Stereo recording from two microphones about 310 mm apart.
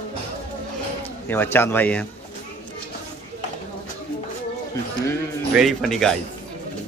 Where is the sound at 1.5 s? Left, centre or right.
Centre.